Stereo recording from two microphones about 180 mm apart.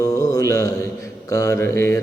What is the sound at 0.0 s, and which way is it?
Mantra, 20° left (ahead or behind).